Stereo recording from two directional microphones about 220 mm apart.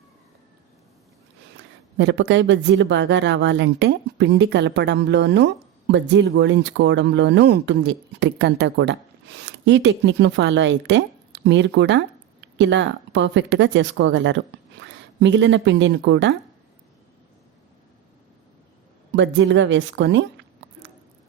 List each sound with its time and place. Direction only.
2.0 s speech: 55° right (ahead or behind)
19.1 s speech: 55° right (ahead or behind)